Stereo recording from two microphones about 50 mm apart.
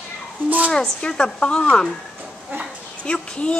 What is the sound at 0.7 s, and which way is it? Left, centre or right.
A woman's voice, centre.